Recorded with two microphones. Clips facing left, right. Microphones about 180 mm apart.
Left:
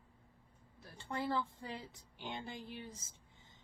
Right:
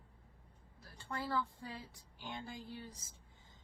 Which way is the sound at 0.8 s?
20° left (ahead or behind).